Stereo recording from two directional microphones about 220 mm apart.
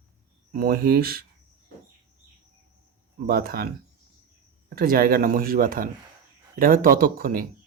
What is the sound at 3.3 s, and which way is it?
Speech, 45° right (ahead or behind).